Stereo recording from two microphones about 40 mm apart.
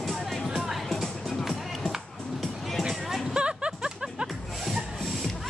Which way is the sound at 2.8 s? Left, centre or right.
Centre.